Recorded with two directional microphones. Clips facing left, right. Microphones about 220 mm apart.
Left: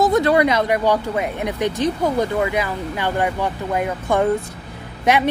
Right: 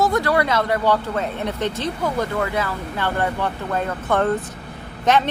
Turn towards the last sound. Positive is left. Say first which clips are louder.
# even
turn(degrees=10)  # may be behind; listen again after turning